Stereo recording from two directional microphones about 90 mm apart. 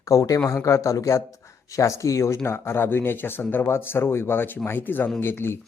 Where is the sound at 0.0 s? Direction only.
40° left (ahead or behind).